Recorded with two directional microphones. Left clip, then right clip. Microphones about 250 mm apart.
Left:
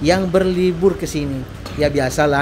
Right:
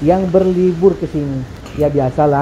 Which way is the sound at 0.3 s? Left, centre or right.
Centre.